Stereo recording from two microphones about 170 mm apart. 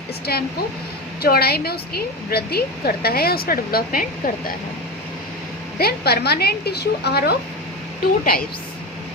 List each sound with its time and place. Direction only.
0.3 s a woman's voice: 65° left (ahead or behind)
5.8 s a woman's voice: 70° left (ahead or behind)